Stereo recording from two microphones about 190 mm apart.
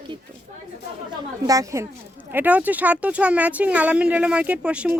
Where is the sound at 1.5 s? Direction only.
15° right (ahead or behind).